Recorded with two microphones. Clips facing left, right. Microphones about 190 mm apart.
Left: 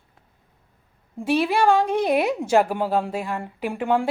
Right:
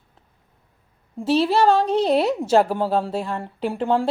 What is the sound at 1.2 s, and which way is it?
Speech, 15° left (ahead or behind).